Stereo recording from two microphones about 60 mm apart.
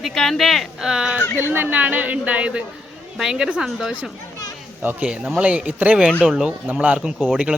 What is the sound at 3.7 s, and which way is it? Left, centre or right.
Speech, centre.